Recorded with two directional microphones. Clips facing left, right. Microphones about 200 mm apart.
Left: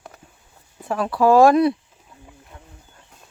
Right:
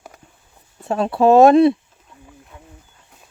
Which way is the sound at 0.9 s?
25° right (ahead or behind).